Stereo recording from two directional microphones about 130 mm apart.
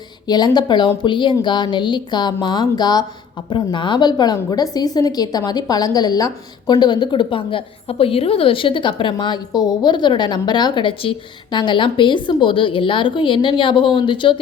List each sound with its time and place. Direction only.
0.3 s a woman's voice: 30° left (ahead or behind)